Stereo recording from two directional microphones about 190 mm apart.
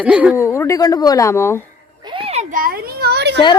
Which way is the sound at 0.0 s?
5° right (ahead or behind).